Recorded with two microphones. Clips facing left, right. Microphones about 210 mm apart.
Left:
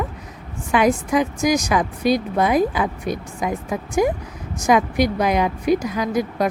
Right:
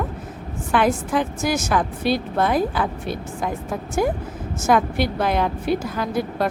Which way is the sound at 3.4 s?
Centre (ahead or behind).